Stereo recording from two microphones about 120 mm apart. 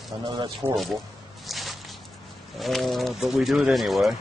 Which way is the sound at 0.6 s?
15° right (ahead or behind).